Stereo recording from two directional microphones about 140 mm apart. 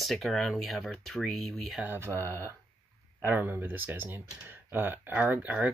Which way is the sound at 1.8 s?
15° right (ahead or behind).